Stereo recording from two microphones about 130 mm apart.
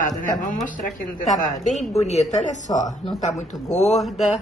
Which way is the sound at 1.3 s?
75° left (ahead or behind).